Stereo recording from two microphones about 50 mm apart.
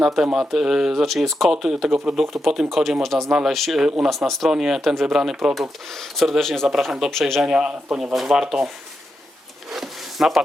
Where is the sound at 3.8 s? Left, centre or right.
Centre.